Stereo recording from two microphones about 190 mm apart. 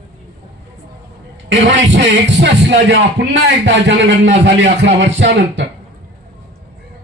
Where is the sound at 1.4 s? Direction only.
75° right (ahead or behind).